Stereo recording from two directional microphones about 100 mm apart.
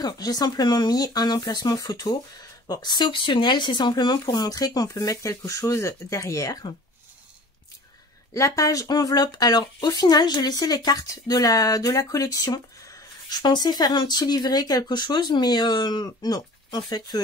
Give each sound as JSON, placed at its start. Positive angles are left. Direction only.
{"t": 0.0, "sound": "speech", "side_deg": 45}
{"t": 8.3, "sound": "speech", "side_deg": 30}